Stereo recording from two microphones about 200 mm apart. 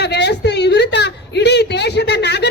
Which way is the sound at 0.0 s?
55° left (ahead or behind).